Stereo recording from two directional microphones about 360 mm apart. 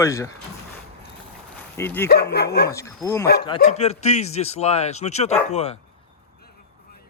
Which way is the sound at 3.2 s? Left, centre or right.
Left.